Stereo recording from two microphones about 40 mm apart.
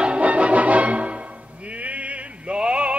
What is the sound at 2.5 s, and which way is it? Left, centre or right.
Music, right.